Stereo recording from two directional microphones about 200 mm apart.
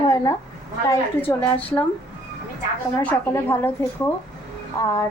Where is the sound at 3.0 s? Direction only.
10° left (ahead or behind).